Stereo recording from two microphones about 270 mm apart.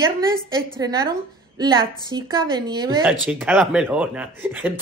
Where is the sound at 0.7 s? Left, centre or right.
Centre.